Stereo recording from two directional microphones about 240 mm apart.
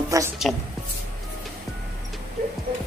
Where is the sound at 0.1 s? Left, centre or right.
Centre.